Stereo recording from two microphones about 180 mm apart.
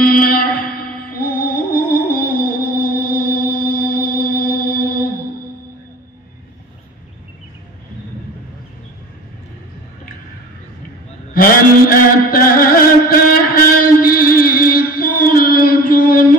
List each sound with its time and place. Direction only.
0.0 s music: 55° left (ahead or behind)
11.3 s mantra: 55° left (ahead or behind)